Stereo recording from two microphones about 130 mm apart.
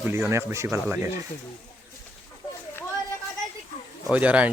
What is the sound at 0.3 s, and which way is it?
Speech, 20° right (ahead or behind).